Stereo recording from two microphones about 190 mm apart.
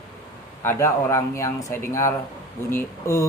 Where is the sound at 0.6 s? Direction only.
15° left (ahead or behind).